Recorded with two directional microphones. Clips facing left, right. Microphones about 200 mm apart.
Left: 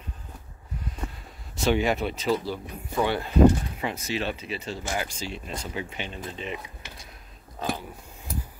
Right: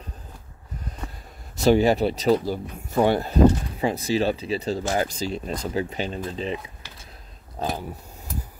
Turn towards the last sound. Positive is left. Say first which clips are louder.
# right 2 dB
turn(degrees=-40)  # may be behind; listen again after turning